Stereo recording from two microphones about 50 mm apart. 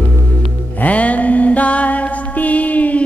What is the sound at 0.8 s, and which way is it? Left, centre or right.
Music, left.